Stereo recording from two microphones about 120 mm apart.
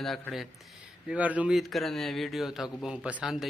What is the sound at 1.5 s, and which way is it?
Speech, centre (ahead or behind).